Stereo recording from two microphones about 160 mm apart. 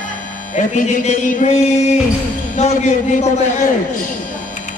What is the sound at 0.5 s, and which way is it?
A man's voice, 50° left (ahead or behind).